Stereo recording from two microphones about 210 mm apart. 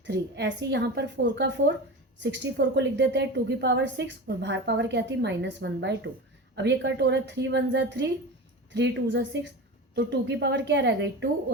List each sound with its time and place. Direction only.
0.0 s a woman's voice: 55° right (ahead or behind)